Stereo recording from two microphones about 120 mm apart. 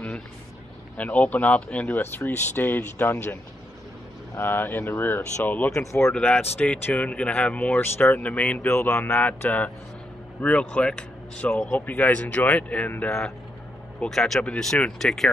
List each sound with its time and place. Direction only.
0.9 s speech: 10° left (ahead or behind)
4.4 s speech: 20° left (ahead or behind)
6.1 s speech: 10° left (ahead or behind)